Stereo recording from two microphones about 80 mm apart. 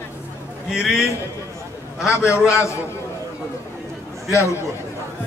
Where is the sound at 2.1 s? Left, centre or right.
Left.